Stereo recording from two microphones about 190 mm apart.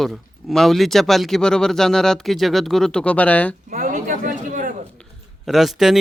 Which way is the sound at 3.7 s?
45° right (ahead or behind).